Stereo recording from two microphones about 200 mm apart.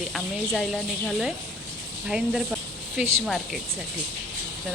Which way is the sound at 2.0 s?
5° right (ahead or behind).